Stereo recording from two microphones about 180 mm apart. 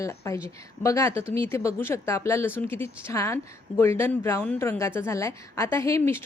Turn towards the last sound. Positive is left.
turn(degrees=15)  # may be behind; listen again after turning